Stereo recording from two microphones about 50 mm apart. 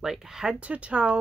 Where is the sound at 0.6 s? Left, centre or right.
Right.